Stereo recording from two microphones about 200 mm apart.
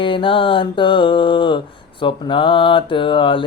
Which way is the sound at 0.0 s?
25° left (ahead or behind).